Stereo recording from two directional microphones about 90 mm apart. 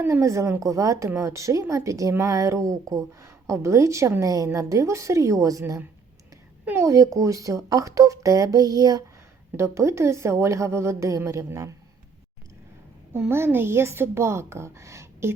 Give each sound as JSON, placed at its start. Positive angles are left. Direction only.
{"t": 0.0, "sound": "speech", "side_deg": -30}
{"t": 6.8, "sound": "speech", "side_deg": -40}
{"t": 9.6, "sound": "speech", "side_deg": -30}
{"t": 13.1, "sound": "speech", "side_deg": -25}